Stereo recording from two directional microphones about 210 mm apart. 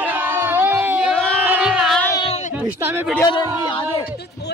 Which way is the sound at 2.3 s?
35° left (ahead or behind).